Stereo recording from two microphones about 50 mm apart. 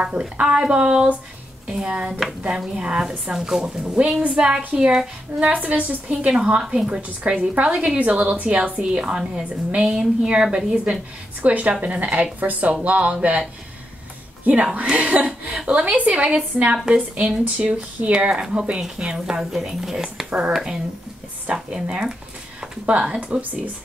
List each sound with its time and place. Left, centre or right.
0.0 s a woman's voice: right
5.5 s a woman's voice: right
8.0 s a woman's voice: right
9.8 s a woman's voice: centre
14.4 s speech: right
16.7 s a woman's voice: centre
17.6 s a woman's voice: right
20.2 s speech: right
20.5 s a woman's voice: centre; by 23.6 s right